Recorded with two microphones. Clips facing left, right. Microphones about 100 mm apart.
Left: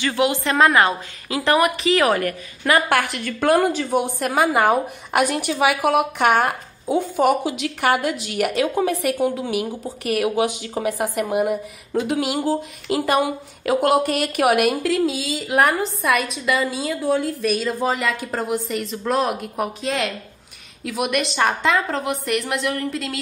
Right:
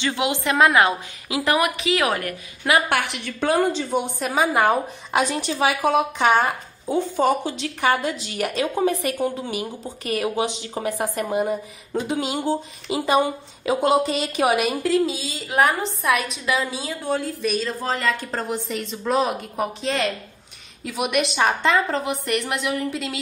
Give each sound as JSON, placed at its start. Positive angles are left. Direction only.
{"t": 0.0, "sound": "a woman's voice", "side_deg": -20}
{"t": 12.8, "sound": "speech", "side_deg": -10}
{"t": 13.2, "sound": "a woman's voice", "side_deg": 5}
{"t": 14.0, "sound": "a woman's voice", "side_deg": 65}
{"t": 14.7, "sound": "a woman's voice", "side_deg": 0}
{"t": 17.6, "sound": "a woman's voice", "side_deg": 10}